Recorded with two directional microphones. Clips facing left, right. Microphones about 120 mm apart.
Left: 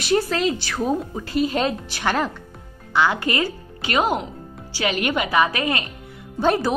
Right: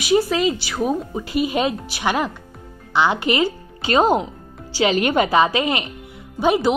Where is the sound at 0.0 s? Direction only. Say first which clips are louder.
Right 3 dB; 5° right (ahead or behind).